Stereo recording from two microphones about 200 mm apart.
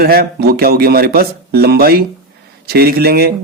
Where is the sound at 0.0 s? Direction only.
50° right (ahead or behind).